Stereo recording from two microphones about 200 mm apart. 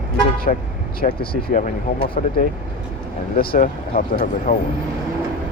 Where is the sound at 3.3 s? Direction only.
45° left (ahead or behind).